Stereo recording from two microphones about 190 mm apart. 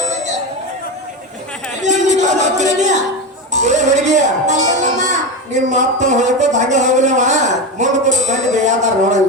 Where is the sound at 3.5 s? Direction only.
40° right (ahead or behind).